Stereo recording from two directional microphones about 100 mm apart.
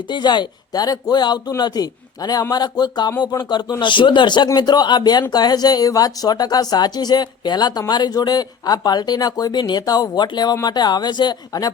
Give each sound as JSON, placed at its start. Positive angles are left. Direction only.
{"t": 0.1, "sound": "speech", "side_deg": 50}